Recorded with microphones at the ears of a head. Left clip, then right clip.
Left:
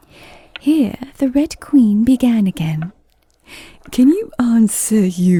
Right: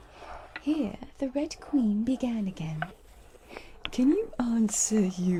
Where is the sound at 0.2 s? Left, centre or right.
Left.